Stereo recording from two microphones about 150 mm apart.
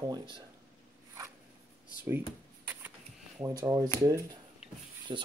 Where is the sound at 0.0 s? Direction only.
25° right (ahead or behind).